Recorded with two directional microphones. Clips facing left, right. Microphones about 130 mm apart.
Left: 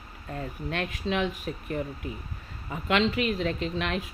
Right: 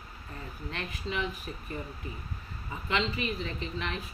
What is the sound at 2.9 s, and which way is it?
Speech, 65° left (ahead or behind).